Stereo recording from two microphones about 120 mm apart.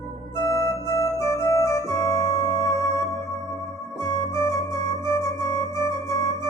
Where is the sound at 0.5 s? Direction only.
25° left (ahead or behind).